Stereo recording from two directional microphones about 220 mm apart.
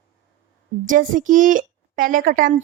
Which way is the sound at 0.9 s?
35° right (ahead or behind).